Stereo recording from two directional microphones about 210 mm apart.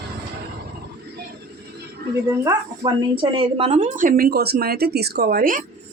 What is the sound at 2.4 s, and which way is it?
A woman's voice, 20° right (ahead or behind).